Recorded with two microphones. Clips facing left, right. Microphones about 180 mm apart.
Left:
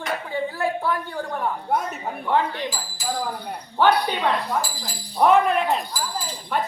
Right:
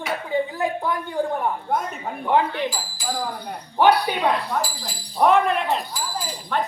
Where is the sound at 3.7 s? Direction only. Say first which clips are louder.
Right 2 dB; 10° right (ahead or behind).